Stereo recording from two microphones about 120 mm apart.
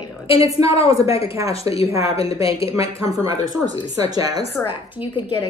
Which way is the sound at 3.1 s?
25° right (ahead or behind).